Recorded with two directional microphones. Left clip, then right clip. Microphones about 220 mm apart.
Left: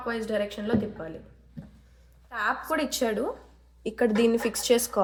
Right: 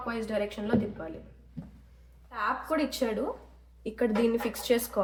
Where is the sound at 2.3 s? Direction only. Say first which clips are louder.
Left 2 dB; 30° left (ahead or behind).